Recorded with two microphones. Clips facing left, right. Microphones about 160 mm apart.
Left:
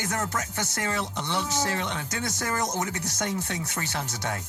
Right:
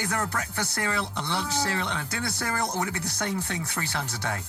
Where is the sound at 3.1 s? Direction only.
20° left (ahead or behind).